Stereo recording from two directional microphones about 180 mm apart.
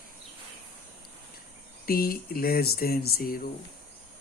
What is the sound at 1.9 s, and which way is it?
Speech, 55° left (ahead or behind).